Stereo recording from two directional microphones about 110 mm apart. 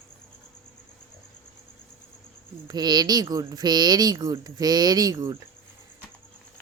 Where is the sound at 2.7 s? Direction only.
40° right (ahead or behind).